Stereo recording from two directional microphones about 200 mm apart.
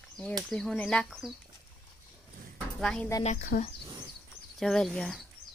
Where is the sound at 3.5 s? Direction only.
45° left (ahead or behind).